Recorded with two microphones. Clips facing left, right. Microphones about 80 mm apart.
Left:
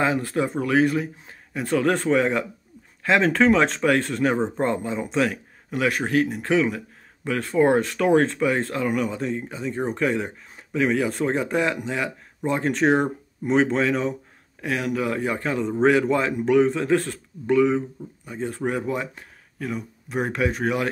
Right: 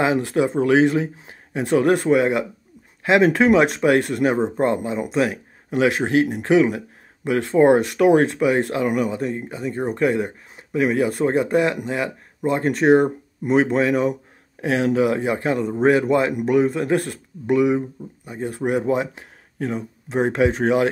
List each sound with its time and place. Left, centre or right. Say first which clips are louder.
0.2 s speech: right 5 dB; centre
14.8 s speech: right 7 dB; right